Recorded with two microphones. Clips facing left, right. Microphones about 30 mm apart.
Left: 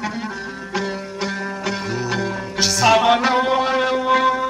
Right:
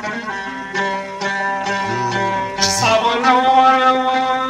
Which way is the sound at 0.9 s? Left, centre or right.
Right.